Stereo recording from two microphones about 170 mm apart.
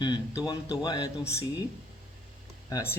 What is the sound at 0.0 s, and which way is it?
Speech, 25° left (ahead or behind).